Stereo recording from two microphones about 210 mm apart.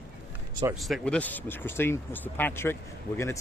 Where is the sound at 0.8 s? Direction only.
Centre (ahead or behind).